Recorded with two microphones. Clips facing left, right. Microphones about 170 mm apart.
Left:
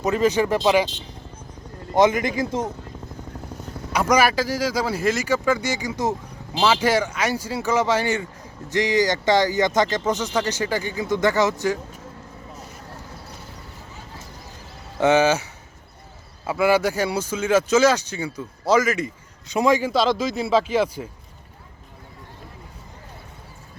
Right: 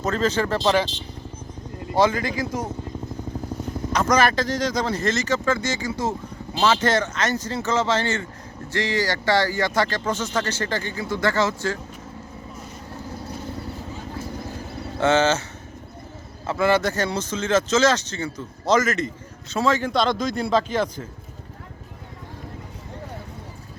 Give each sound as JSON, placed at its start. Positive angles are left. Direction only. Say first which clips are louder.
{"t": 0.0, "sound": "speech", "louder": "left 3 dB", "side_deg": 15}
{"t": 2.0, "sound": "speech", "louder": "left 2 dB", "side_deg": 20}
{"t": 3.9, "sound": "speech", "louder": "left 1 dB", "side_deg": 10}
{"t": 15.0, "sound": "speech", "louder": "left 2 dB", "side_deg": 15}
{"t": 16.5, "sound": "speech", "louder": "left 1 dB", "side_deg": 10}